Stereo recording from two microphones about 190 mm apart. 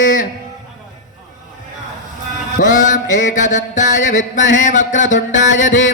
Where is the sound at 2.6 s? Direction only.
40° left (ahead or behind).